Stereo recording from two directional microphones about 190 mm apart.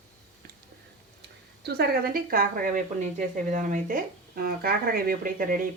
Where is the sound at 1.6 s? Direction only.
55° right (ahead or behind).